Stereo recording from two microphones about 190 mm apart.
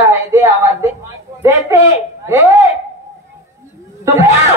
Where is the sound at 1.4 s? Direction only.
15° right (ahead or behind).